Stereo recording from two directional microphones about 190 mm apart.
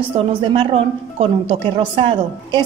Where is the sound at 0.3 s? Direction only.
25° right (ahead or behind).